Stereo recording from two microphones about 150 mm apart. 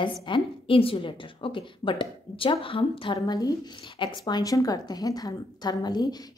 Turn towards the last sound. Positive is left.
turn(degrees=25)  # may be behind; listen again after turning